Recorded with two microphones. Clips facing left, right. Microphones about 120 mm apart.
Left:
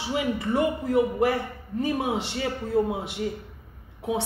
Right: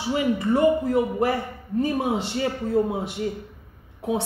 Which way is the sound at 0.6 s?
35° right (ahead or behind).